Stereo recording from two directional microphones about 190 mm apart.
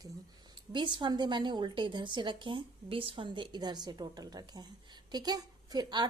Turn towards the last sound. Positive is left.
turn(degrees=-20)  # may be behind; listen again after turning